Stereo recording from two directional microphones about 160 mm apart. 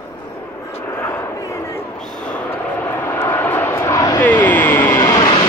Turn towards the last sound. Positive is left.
turn(degrees=25)  # may be behind; listen again after turning